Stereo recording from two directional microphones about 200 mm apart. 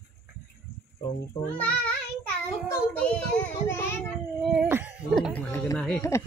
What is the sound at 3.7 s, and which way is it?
Child singing, 10° left (ahead or behind).